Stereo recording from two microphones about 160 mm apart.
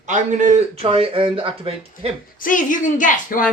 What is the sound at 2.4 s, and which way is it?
A woman's voice, 55° left (ahead or behind).